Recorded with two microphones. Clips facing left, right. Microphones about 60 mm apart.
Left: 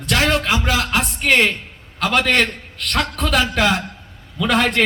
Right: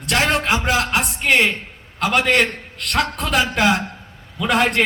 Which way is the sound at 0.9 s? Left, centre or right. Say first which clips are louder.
Left 1 dB; centre.